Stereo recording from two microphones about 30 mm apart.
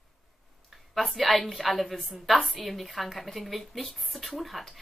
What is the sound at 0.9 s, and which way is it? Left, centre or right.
Speech, centre.